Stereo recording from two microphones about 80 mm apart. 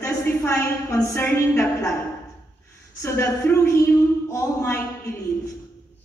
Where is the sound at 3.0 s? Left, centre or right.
Left.